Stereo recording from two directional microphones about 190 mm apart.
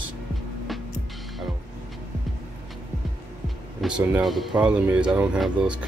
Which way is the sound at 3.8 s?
Centre (ahead or behind).